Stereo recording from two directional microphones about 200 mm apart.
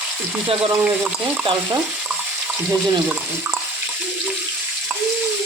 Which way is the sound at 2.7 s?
10° right (ahead or behind).